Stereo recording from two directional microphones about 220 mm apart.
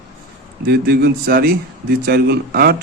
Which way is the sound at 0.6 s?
45° right (ahead or behind).